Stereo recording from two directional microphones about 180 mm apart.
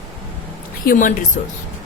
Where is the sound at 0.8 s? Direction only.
45° left (ahead or behind).